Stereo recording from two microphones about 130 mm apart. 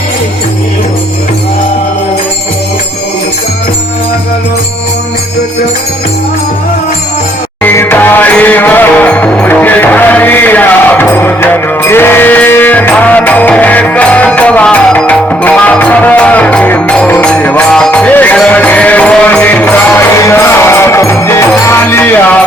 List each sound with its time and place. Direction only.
7.6 s music: 15° left (ahead or behind)
19.6 s music: 20° left (ahead or behind)